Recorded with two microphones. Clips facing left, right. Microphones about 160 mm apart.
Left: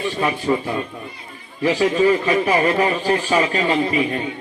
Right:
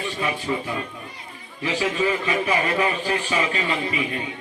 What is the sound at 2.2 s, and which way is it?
A man's voice, 40° left (ahead or behind).